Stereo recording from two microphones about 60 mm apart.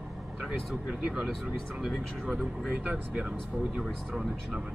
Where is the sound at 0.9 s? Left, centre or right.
Centre.